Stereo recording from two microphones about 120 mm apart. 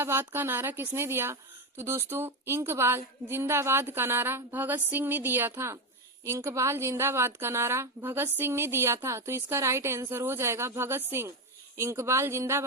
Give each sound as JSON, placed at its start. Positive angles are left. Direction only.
{"t": 0.0, "sound": "a woman's voice", "side_deg": -20}